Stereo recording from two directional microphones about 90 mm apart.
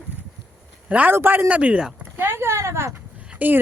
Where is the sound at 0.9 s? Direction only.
15° right (ahead or behind).